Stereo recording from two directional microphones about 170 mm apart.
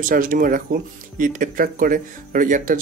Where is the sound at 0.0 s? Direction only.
55° right (ahead or behind).